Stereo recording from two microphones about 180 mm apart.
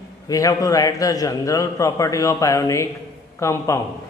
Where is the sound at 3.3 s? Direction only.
15° left (ahead or behind).